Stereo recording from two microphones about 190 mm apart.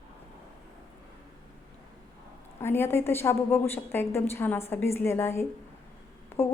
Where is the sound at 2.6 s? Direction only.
10° left (ahead or behind).